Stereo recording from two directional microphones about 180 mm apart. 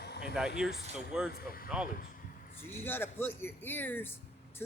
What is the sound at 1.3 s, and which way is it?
Speech, 55° left (ahead or behind).